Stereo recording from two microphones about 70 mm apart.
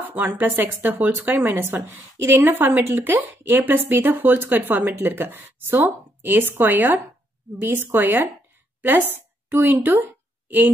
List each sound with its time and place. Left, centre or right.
0.0 s a woman's voice: right